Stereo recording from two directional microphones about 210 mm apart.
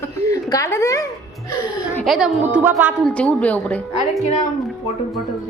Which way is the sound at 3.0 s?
5° left (ahead or behind).